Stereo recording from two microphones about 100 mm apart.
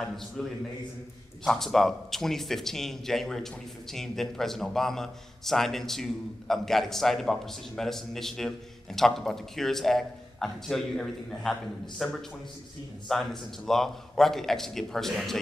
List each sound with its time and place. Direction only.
0.0 s a man's voice: 5° left (ahead or behind)